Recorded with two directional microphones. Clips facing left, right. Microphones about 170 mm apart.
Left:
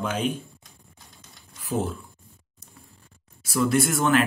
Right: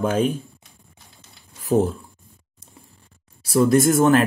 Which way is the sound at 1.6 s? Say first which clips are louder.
Right 8 dB; 40° right (ahead or behind).